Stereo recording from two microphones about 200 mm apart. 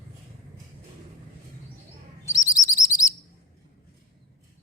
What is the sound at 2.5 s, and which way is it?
Chirp, 15° left (ahead or behind).